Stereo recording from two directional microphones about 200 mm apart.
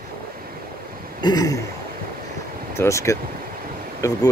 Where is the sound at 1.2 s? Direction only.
20° left (ahead or behind).